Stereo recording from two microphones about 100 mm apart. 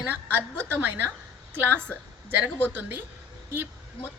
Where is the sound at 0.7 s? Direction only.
20° right (ahead or behind).